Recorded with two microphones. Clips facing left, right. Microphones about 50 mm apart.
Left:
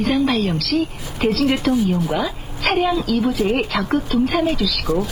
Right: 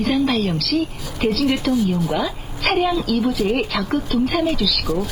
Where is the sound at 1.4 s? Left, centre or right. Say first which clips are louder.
Left 1 dB; left.